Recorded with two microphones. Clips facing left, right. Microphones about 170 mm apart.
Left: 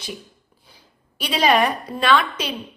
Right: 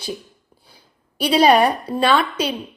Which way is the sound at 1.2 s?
35° right (ahead or behind).